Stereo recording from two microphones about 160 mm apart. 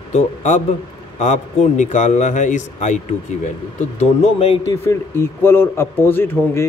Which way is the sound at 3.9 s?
35° left (ahead or behind).